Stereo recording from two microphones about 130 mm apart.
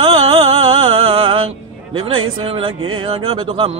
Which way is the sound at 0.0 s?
40° right (ahead or behind).